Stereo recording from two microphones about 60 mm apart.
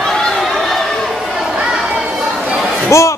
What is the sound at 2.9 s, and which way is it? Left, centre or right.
Slam, left.